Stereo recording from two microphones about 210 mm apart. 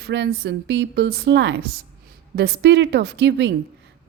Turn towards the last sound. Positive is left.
turn(degrees=-55)  # may be behind; listen again after turning